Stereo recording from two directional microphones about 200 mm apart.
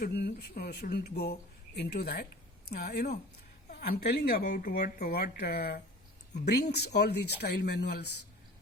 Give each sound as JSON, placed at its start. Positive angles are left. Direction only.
{"t": 0.0, "sound": "speech", "side_deg": 55}